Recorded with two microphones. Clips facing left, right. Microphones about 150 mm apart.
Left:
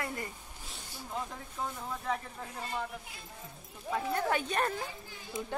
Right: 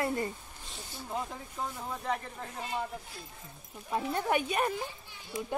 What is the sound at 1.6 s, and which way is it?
Speech, centre (ahead or behind).